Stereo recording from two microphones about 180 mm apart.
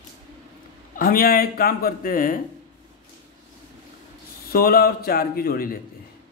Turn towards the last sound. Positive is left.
turn(degrees=55)  # may be behind; listen again after turning